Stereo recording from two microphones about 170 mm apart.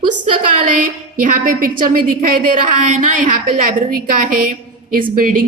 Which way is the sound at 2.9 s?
50° right (ahead or behind).